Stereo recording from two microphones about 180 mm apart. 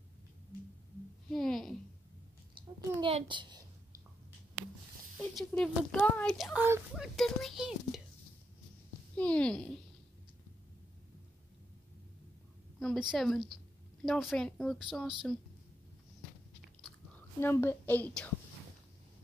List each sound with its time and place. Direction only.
1.3 s speech: centre (ahead or behind)
2.5 s a child's voice: 30° right (ahead or behind)
5.3 s speech: 5° left (ahead or behind)
6.6 s speech: 10° right (ahead or behind)
7.2 s speech: centre (ahead or behind)
9.1 s speech: 5° left (ahead or behind)
12.7 s speech: centre (ahead or behind)
17.4 s a child's voice: 10° left (ahead or behind)